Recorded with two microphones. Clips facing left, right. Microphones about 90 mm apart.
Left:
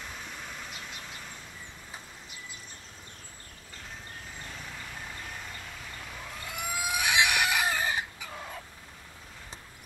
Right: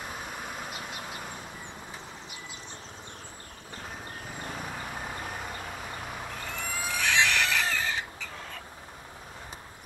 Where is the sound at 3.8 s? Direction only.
55° right (ahead or behind).